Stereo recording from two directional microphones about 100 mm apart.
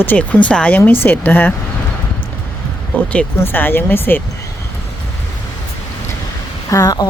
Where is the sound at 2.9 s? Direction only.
15° left (ahead or behind).